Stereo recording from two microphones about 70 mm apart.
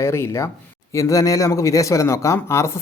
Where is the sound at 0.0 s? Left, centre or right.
Left.